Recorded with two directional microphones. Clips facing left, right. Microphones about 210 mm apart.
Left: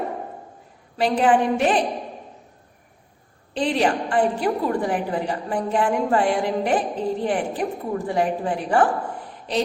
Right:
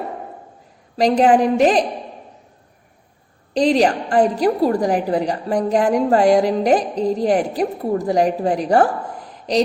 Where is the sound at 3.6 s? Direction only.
40° right (ahead or behind).